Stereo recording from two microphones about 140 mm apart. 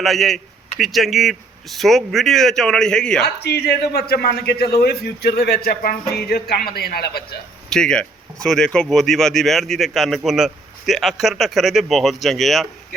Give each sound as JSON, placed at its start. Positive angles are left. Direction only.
{"t": 0.0, "sound": "speech", "side_deg": 0}
{"t": 4.0, "sound": "a man's voice", "side_deg": 90}
{"t": 7.7, "sound": "speech", "side_deg": 5}